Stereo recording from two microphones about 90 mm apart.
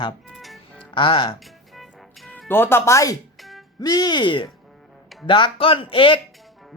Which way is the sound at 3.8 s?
50° left (ahead or behind).